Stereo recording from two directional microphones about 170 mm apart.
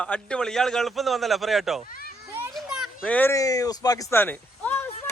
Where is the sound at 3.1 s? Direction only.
10° left (ahead or behind).